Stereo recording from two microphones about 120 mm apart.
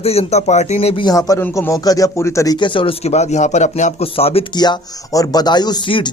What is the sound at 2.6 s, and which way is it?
A man's voice, 45° left (ahead or behind).